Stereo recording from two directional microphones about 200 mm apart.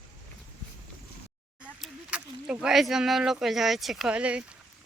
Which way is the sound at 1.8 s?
5° right (ahead or behind).